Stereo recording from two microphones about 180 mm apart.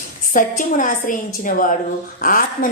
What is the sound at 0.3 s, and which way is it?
Speech, 45° left (ahead or behind).